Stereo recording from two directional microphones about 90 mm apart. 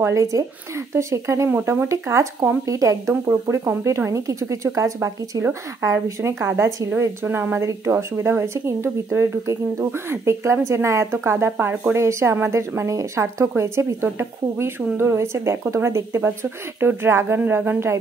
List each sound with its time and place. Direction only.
0.0 s speech: 35° right (ahead or behind)